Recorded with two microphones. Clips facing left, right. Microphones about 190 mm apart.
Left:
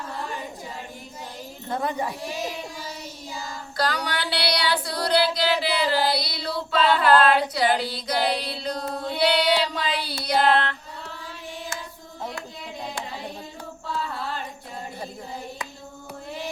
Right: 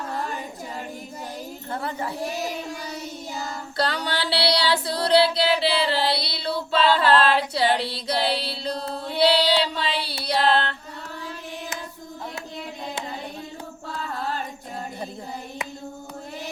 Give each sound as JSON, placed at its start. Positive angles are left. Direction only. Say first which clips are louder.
{"t": 1.7, "sound": "speech", "louder": "left 3 dB", "side_deg": 15}
{"t": 3.8, "sound": "music", "louder": "right 1 dB", "side_deg": -25}
{"t": 10.2, "sound": "female singing", "louder": "left 1 dB", "side_deg": -30}